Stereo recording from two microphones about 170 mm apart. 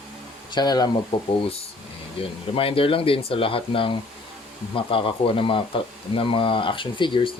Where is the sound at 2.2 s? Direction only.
35° left (ahead or behind).